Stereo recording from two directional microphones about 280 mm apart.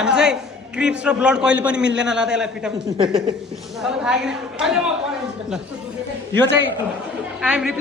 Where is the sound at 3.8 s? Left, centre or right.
Centre.